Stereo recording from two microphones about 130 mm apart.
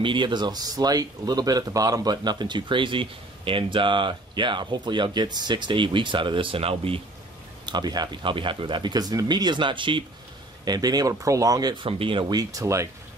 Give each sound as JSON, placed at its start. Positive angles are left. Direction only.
{"t": 0.0, "sound": "speech", "side_deg": -40}
{"t": 7.6, "sound": "speech", "side_deg": -35}
{"t": 11.8, "sound": "speech", "side_deg": -40}